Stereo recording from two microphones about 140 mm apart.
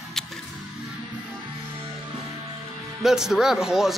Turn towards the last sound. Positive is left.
turn(degrees=-5)  # may be behind; listen again after turning